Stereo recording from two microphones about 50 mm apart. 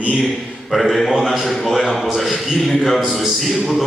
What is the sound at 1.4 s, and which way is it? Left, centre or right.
A man's voice, centre.